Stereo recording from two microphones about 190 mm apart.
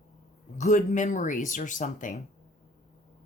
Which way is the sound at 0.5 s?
40° left (ahead or behind).